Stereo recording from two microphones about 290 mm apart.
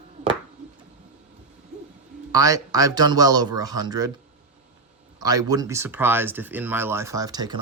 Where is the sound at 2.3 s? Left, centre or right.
Centre.